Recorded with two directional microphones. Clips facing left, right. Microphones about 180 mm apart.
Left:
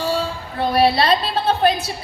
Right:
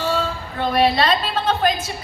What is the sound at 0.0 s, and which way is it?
A woman's voice, 35° left (ahead or behind).